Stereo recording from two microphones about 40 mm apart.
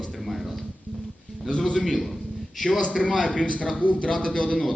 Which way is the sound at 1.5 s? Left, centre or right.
Centre.